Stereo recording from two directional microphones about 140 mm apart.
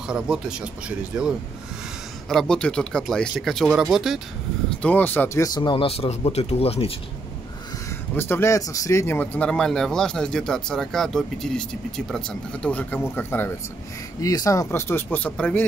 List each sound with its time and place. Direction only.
0.0 s speech: 5° right (ahead or behind)
4.6 s speech: 10° left (ahead or behind)
5.6 s speech: 35° left (ahead or behind)
8.2 s speech: 15° left (ahead or behind)
14.2 s speech: 25° left (ahead or behind)